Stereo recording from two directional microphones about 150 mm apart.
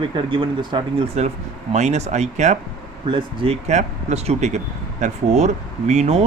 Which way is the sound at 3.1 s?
35° right (ahead or behind).